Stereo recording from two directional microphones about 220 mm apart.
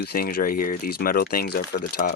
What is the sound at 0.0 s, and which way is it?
Speech, 45° left (ahead or behind).